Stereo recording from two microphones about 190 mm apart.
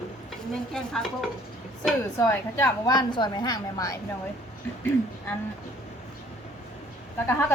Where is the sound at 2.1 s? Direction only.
15° left (ahead or behind).